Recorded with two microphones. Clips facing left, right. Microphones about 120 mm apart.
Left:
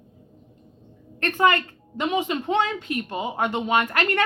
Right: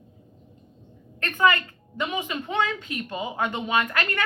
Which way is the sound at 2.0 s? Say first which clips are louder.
Left 5 dB; 35° left (ahead or behind).